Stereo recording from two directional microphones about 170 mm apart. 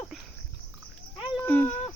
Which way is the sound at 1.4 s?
10° left (ahead or behind).